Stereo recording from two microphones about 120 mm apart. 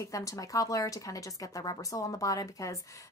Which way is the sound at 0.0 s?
25° left (ahead or behind).